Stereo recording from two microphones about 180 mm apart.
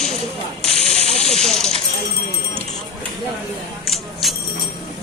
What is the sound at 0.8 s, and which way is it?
Hiss, 35° left (ahead or behind).